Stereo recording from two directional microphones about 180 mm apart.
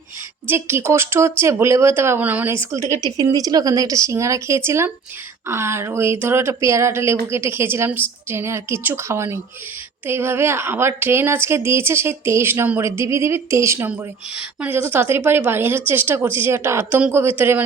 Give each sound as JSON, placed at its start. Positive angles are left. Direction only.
{"t": 0.4, "sound": "speech", "side_deg": -15}